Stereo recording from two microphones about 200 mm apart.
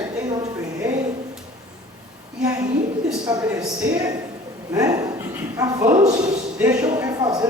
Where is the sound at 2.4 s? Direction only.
15° right (ahead or behind).